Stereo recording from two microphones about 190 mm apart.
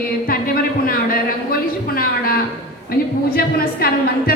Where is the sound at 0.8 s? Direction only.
50° left (ahead or behind).